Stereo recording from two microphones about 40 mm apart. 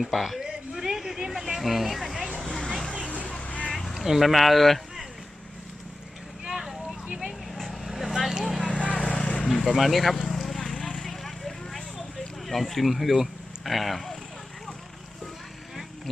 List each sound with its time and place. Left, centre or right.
0.0 s speech: centre
0.4 s vehicle: centre
2.4 s vehicle: centre
3.1 s vehicle: left
3.7 s a sound: centre
4.0 s speech: centre
6.5 s vehicle: centre
8.6 s vehicle: left
9.0 s vehicle: centre
9.2 s vehicle: left
9.5 s speech: centre
10.3 s a sound: centre
12.5 s speech: centre